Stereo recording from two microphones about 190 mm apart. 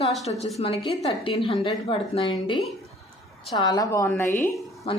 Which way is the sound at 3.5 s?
20° left (ahead or behind).